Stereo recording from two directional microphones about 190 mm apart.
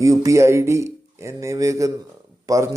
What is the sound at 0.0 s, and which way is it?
Speech, 15° right (ahead or behind).